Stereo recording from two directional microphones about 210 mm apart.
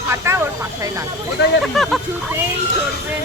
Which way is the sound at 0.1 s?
10° right (ahead or behind).